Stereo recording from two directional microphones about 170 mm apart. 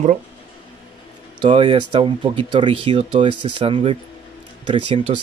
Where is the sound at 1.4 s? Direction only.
30° right (ahead or behind).